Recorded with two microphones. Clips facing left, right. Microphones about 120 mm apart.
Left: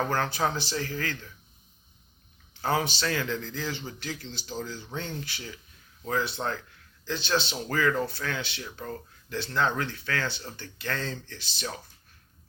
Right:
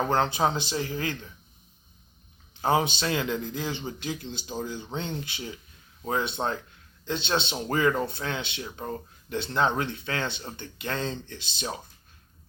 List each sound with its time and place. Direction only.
0.0 s speech: 20° right (ahead or behind)
2.5 s speech: 20° right (ahead or behind)